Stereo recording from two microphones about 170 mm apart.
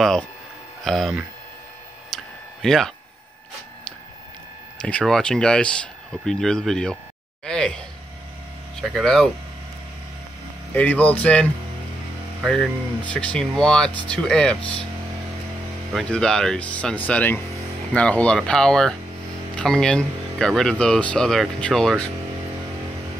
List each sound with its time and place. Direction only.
0.8 s speech: centre (ahead or behind)
2.0 s a sound: centre (ahead or behind)
4.8 s speech: 5° left (ahead or behind)
7.4 s a sound: 5° left (ahead or behind)
8.7 s speech: centre (ahead or behind)
10.7 s speech: 10° left (ahead or behind)
15.9 s speech: 5° left (ahead or behind)